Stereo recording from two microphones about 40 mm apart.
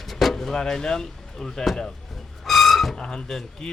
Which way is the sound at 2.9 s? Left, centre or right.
Centre.